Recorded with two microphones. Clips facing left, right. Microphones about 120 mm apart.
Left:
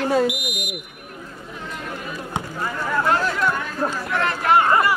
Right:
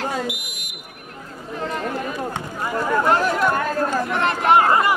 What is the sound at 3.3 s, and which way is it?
Chatter, 50° right (ahead or behind).